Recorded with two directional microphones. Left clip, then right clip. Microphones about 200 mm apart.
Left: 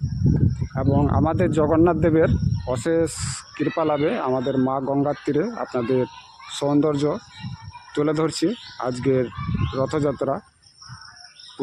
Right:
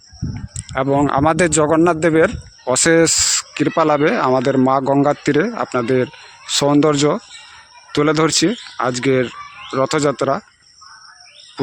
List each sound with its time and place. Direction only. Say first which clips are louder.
0.7 s speech: right 8 dB; 20° right (ahead or behind)
2.6 s speech: right 9 dB; 15° right (ahead or behind)
9.7 s speech: right 7 dB; 20° right (ahead or behind)